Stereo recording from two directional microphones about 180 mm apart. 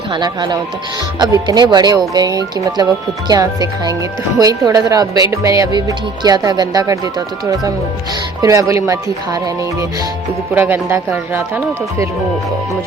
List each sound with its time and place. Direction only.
0.1 s speech: 25° right (ahead or behind)
8.4 s speech: 20° right (ahead or behind)
10.5 s speech: 10° right (ahead or behind)